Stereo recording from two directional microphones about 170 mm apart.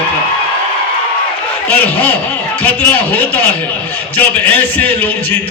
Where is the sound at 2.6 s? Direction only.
10° left (ahead or behind).